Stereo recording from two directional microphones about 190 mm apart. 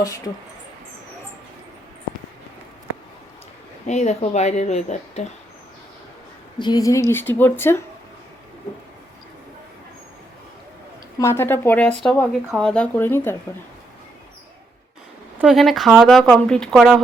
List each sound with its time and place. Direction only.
3.8 s speech: 35° left (ahead or behind)
6.6 s a woman's voice: 20° left (ahead or behind)
11.2 s a woman's voice: 15° left (ahead or behind)
15.4 s speech: centre (ahead or behind)